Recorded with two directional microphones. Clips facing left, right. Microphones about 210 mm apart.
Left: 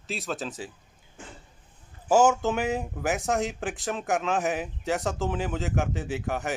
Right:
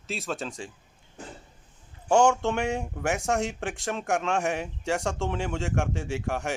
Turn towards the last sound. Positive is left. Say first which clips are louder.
# even
turn(degrees=0)  # may be behind; listen again after turning